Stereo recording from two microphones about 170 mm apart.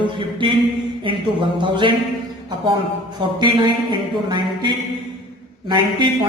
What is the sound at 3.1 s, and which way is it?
Mantra, 25° right (ahead or behind).